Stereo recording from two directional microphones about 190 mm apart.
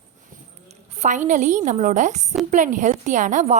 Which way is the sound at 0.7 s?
35° right (ahead or behind).